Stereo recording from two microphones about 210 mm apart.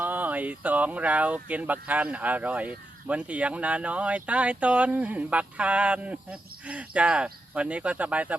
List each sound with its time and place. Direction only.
0.0 s speech: 10° right (ahead or behind)